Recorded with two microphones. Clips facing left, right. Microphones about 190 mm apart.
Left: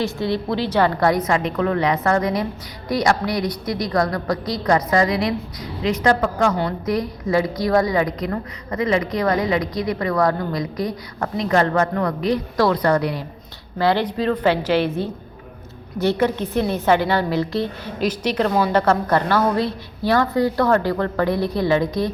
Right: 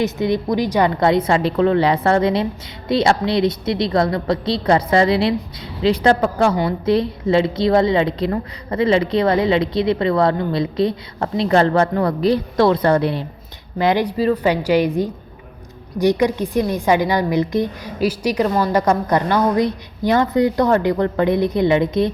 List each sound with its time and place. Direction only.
0.0 s a woman's voice: 20° right (ahead or behind)
13.7 s a woman's voice: 15° right (ahead or behind)